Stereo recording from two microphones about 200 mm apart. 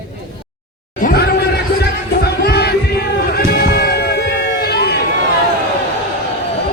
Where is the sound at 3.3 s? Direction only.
50° left (ahead or behind).